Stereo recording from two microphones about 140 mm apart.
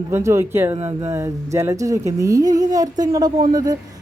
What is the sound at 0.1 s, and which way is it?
Speech, 20° right (ahead or behind).